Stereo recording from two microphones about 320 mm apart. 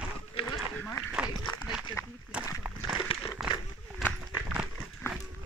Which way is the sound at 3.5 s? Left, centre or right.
Centre.